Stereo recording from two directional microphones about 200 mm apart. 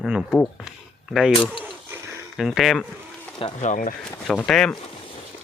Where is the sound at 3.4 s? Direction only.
35° left (ahead or behind).